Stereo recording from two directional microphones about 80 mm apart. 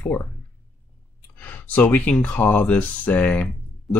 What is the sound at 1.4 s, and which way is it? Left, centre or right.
Speech, centre.